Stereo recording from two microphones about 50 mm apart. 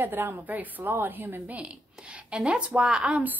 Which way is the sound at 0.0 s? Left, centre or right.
Right.